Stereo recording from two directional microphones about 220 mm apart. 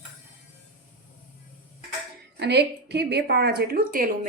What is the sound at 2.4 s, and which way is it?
A woman's voice, 50° right (ahead or behind).